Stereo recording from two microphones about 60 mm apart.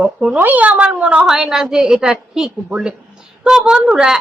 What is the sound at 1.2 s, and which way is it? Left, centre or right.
A woman's voice, centre.